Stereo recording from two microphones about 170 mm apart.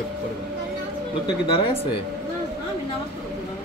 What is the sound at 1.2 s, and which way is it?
Speech, 30° left (ahead or behind).